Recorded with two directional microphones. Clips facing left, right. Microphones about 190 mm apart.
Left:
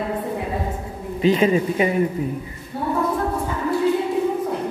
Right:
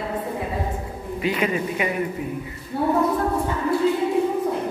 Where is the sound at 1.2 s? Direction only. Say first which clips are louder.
Left 6 dB; 30° left (ahead or behind).